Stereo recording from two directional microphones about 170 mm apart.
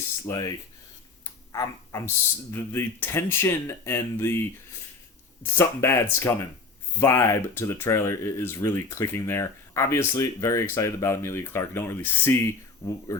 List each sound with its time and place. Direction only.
0.3 s speech: 20° left (ahead or behind)
5.5 s speech: 15° left (ahead or behind)